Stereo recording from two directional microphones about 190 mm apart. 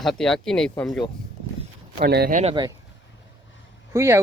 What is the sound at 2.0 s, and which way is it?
Speech, 55° right (ahead or behind).